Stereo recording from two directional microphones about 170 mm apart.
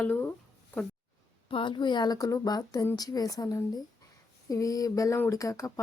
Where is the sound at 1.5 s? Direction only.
30° left (ahead or behind).